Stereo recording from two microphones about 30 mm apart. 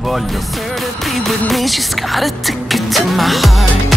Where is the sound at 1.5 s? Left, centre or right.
Centre.